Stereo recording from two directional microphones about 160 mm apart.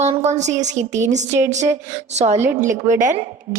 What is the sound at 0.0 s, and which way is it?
A woman's voice, 45° right (ahead or behind).